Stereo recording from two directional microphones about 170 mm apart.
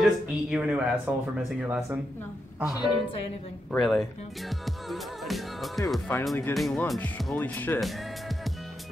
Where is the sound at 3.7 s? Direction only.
Centre (ahead or behind).